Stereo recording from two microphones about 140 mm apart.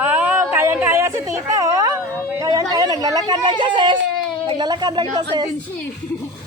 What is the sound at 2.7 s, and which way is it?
Speech, 25° right (ahead or behind).